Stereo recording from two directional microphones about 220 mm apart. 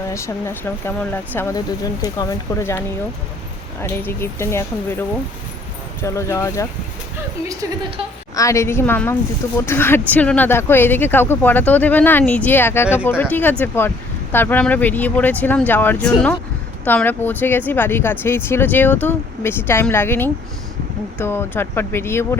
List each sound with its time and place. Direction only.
0.1 s speech: 10° left (ahead or behind)
3.8 s speech: 10° left (ahead or behind)
7.4 s a woman's voice: 20° right (ahead or behind)
8.4 s speech: 15° left (ahead or behind)